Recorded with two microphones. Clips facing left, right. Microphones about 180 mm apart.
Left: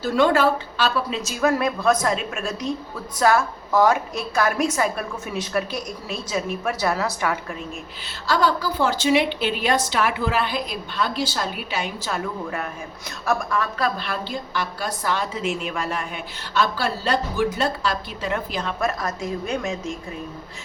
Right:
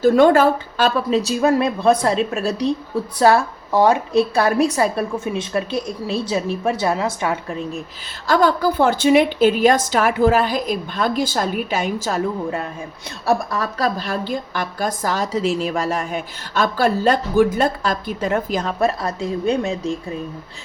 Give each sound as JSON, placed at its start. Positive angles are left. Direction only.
{"t": 0.0, "sound": "a woman's voice", "side_deg": -50}
{"t": 1.2, "sound": "a woman's voice", "side_deg": -30}
{"t": 8.3, "sound": "a woman's voice", "side_deg": -50}
{"t": 12.2, "sound": "a woman's voice", "side_deg": -30}